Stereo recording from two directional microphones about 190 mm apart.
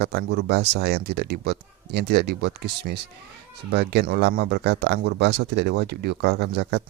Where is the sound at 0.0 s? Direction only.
60° right (ahead or behind).